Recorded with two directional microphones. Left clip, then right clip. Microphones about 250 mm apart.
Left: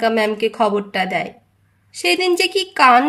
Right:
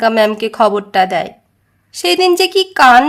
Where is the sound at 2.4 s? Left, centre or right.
Right.